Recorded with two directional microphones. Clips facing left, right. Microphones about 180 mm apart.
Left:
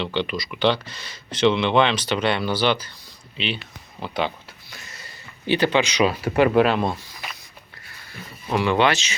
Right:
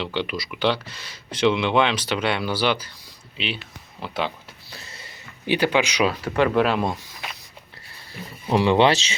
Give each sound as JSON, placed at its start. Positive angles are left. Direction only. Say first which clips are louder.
{"t": 0.0, "sound": "speech", "louder": "left 2 dB", "side_deg": -5}
{"t": 4.7, "sound": "a sound", "louder": "right 1 dB", "side_deg": -30}
{"t": 5.5, "sound": "speech", "louder": "left 1 dB", "side_deg": -10}
{"t": 6.1, "sound": "speech", "louder": "left 2 dB", "side_deg": 10}
{"t": 6.7, "sound": "speech", "louder": "left 1 dB", "side_deg": -5}
{"t": 8.5, "sound": "speech", "louder": "right 2 dB", "side_deg": -30}